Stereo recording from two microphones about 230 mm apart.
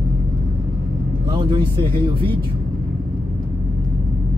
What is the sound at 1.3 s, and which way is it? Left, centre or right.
Speech, centre.